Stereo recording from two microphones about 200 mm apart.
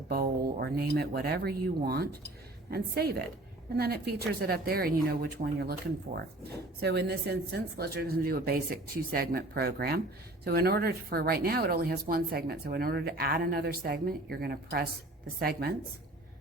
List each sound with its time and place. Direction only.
0.1 s speech: 50° right (ahead or behind)
6.7 s speech: 55° right (ahead or behind)